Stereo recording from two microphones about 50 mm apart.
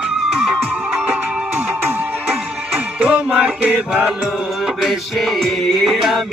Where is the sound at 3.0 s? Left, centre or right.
Right.